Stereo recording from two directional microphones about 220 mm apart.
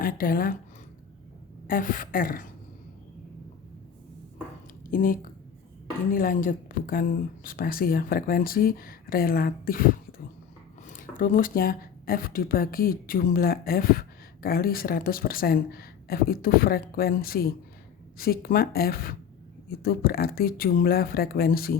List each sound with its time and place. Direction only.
0.0 s speech: 40° left (ahead or behind)
1.6 s speech: 40° left (ahead or behind)
4.9 s speech: 40° left (ahead or behind)